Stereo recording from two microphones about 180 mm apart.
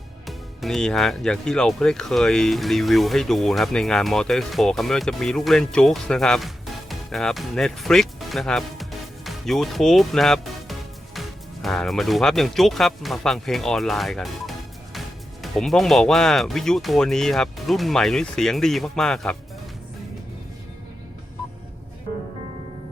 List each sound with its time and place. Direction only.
0.3 s speech: centre (ahead or behind)